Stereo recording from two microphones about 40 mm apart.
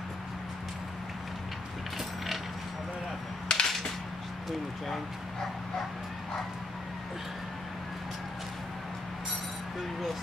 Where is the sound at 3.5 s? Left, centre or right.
Left.